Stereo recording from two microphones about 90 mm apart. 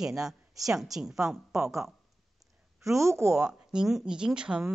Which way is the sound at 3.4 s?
5° right (ahead or behind).